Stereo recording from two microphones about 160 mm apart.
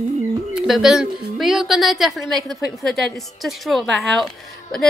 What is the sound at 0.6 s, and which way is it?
A woman's voice, centre (ahead or behind).